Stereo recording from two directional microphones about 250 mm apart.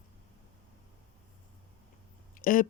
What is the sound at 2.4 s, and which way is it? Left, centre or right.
Speech, left.